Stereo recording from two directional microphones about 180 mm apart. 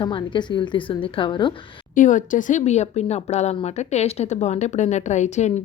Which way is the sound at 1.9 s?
45° left (ahead or behind).